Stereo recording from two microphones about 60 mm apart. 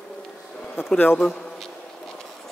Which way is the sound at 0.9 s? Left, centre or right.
Left.